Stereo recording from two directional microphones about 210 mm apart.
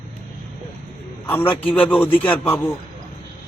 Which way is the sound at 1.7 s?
5° left (ahead or behind).